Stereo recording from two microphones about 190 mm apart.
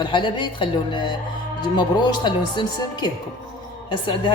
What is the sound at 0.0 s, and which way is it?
A woman's voice, 25° left (ahead or behind).